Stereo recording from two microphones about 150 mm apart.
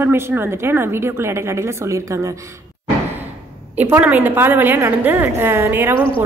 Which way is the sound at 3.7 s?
10° right (ahead or behind).